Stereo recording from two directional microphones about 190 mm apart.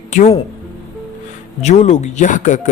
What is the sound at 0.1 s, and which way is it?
Speech, 40° left (ahead or behind).